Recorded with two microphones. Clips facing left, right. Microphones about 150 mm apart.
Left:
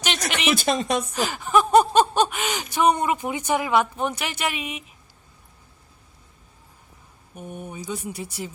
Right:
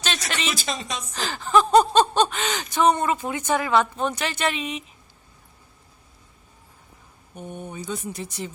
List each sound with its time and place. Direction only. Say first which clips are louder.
0.3 s speech: left 6 dB; 15° left (ahead or behind)
0.5 s speech: left 8 dB; 55° left (ahead or behind)
1.1 s speech: right 3 dB; 15° left (ahead or behind)
7.5 s speech: even; 10° left (ahead or behind)